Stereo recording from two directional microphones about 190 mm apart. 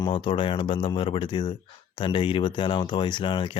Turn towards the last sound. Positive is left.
turn(degrees=25)  # may be behind; listen again after turning